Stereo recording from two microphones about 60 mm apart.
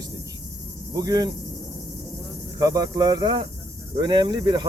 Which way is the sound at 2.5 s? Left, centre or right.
Right.